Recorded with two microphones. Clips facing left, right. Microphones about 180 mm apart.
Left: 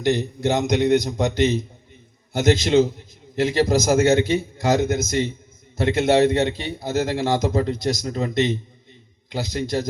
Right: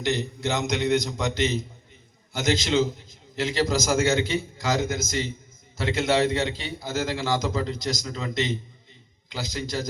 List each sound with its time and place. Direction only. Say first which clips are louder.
0.0 s a man's voice: left 6 dB; 50° left (ahead or behind)